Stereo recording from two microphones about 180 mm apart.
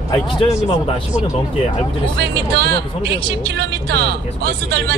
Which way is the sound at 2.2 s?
65° right (ahead or behind).